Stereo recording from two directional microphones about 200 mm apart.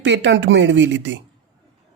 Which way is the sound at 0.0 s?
65° right (ahead or behind).